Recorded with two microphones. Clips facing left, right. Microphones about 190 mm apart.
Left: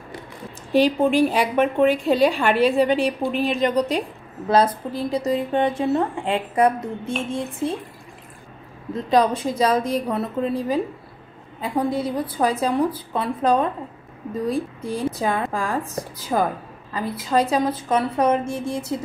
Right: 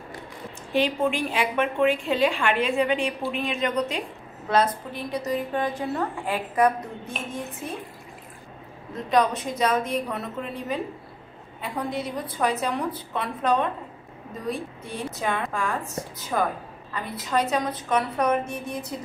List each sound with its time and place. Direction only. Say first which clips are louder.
0.7 s a woman's voice: left 7 dB; 35° left (ahead or behind)
9.1 s a woman's voice: left 4 dB; 30° left (ahead or behind)
15.1 s a woman's voice: left 4 dB; 35° left (ahead or behind)